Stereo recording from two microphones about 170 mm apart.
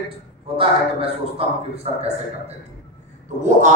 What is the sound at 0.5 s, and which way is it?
A man's voice, 35° right (ahead or behind).